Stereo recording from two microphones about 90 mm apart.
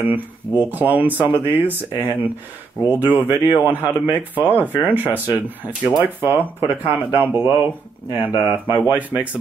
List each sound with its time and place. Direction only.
0.0 s speech: 20° right (ahead or behind)